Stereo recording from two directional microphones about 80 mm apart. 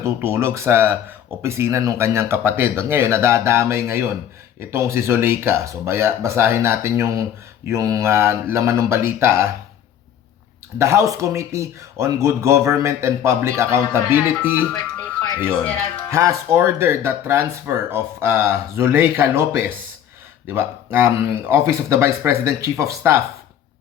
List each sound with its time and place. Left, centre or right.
0.0 s speech: right
7.7 s speech: right
10.8 s speech: right
16.0 s speech: right